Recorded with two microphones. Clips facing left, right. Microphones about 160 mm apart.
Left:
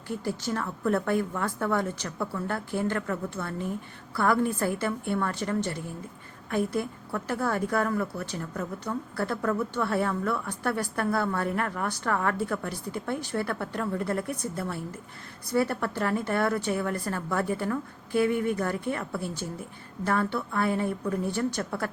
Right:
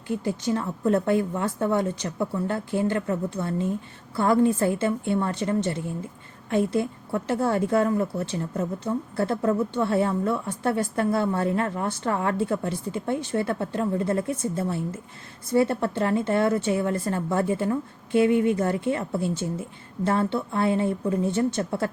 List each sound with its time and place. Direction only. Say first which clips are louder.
0.3 s a woman's voice: right 4 dB; 20° right (ahead or behind)